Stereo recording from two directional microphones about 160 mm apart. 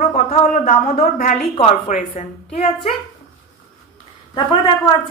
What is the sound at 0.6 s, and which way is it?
Speech, 60° left (ahead or behind).